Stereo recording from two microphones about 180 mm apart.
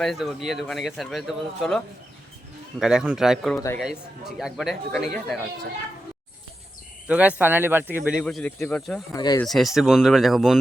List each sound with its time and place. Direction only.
0.0 s speech: centre (ahead or behind)
7.1 s speech: 5° right (ahead or behind)
8.2 s speech: 5° left (ahead or behind)
9.1 s speech: 20° left (ahead or behind)
9.4 s speech: centre (ahead or behind)